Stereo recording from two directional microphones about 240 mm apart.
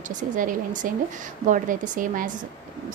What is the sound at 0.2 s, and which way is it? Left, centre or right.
A woman's voice, right.